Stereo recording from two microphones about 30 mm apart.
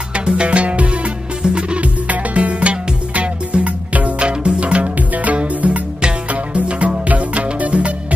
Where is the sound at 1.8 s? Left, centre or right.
Right.